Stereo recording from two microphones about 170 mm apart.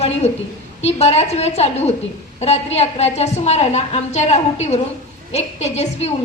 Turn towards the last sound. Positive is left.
turn(degrees=40)  # may be behind; listen again after turning